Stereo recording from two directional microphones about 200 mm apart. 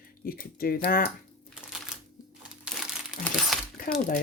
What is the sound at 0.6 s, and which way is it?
Speech, 45° left (ahead or behind).